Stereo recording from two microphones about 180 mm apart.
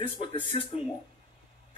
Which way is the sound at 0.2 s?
30° left (ahead or behind).